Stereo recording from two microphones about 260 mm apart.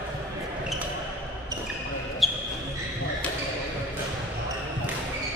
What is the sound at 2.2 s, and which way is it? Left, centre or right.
Basketball bounce, centre.